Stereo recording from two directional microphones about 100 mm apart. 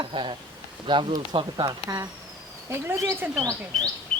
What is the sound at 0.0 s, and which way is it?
Speech, 55° right (ahead or behind).